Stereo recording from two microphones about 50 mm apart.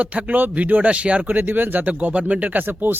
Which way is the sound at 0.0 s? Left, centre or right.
Right.